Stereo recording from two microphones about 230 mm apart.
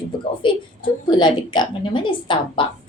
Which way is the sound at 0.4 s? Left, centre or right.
Left.